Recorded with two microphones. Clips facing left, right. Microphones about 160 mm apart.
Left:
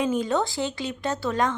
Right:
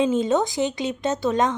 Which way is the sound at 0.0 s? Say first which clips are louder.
Right 4 dB; 25° right (ahead or behind).